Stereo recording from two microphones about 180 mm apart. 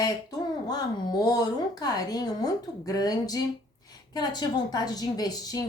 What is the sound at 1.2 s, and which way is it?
A woman's voice, 20° left (ahead or behind).